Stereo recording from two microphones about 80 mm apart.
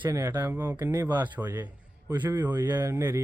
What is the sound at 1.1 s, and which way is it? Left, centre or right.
Speech, right.